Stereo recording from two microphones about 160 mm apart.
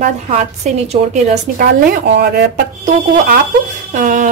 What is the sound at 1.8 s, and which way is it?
Speech, 80° right.